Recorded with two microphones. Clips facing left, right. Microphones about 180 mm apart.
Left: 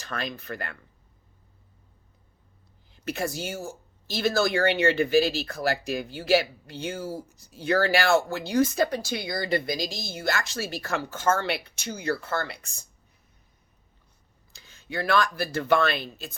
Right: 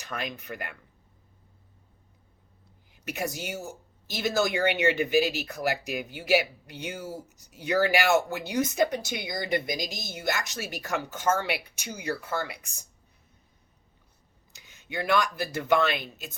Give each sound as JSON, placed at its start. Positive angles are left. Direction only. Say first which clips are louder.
{"t": 0.0, "sound": "speech", "louder": "left 2 dB", "side_deg": -15}
{"t": 2.9, "sound": "speech", "louder": "left 3 dB", "side_deg": -15}
{"t": 14.5, "sound": "speech", "louder": "left 2 dB", "side_deg": -15}